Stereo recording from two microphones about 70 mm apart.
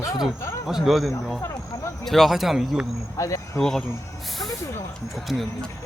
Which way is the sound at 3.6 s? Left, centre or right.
Centre.